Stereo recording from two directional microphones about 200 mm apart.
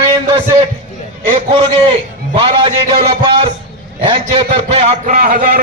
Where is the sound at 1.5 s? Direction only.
25° right (ahead or behind).